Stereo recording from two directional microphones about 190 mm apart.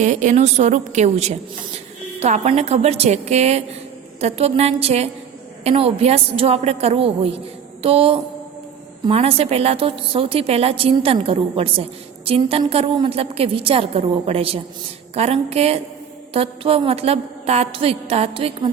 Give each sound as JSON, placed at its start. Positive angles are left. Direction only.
{"t": 0.0, "sound": "a woman's voice", "side_deg": -40}
{"t": 7.8, "sound": "a sound", "side_deg": -30}
{"t": 9.0, "sound": "a woman's voice", "side_deg": -30}